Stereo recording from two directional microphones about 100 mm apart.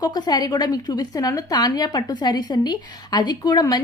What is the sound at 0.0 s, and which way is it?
A woman's voice, 45° left (ahead or behind).